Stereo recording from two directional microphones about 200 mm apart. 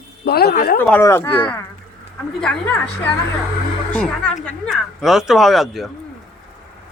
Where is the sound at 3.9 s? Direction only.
5° left (ahead or behind).